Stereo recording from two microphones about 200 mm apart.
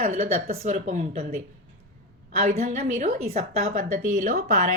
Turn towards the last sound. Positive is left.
turn(degrees=-40)  # may be behind; listen again after turning